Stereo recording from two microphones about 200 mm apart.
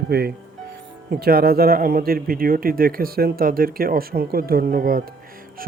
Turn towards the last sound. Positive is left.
turn(degrees=-45)  # may be behind; listen again after turning